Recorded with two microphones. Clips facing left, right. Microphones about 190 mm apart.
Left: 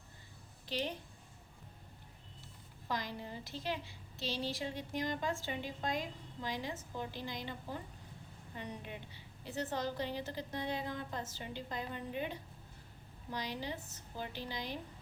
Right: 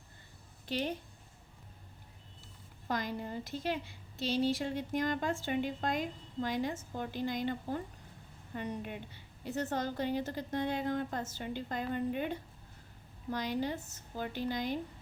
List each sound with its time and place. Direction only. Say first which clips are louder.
0.7 s a woman's voice: right 4 dB; 50° right (ahead or behind)
2.8 s a woman's voice: right 4 dB; 50° right (ahead or behind)